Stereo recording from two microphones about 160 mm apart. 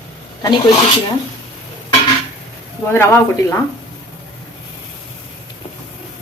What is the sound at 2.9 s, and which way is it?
Speech, 15° left (ahead or behind).